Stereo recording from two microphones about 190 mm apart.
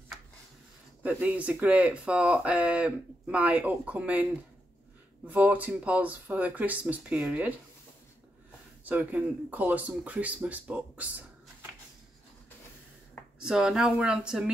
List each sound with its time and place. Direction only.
1.0 s speech: 5° right (ahead or behind)
8.8 s speech: 10° right (ahead or behind)
13.4 s speech: 5° right (ahead or behind)